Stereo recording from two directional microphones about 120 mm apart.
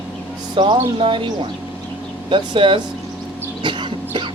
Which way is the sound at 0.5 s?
45° right (ahead or behind).